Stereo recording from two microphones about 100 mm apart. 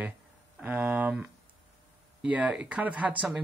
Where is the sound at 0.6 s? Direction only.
15° right (ahead or behind).